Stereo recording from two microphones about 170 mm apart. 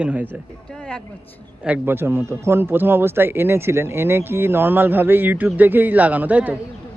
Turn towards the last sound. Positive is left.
turn(degrees=-10)  # may be behind; listen again after turning